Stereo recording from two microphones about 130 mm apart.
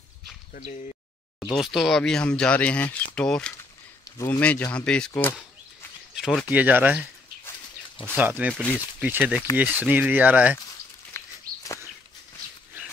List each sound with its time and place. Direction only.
0.5 s speech: 90° left
1.4 s speech: centre (ahead or behind)
6.1 s a sound: 5° right (ahead or behind)
6.5 s speech: 15° right (ahead or behind)
8.2 s speech: 15° right (ahead or behind)
11.1 s a sound: 25° left (ahead or behind)